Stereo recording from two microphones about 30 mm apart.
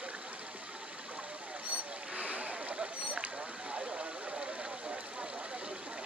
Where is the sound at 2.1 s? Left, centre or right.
Right.